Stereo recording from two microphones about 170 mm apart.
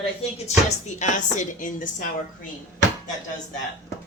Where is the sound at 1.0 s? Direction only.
45° left (ahead or behind).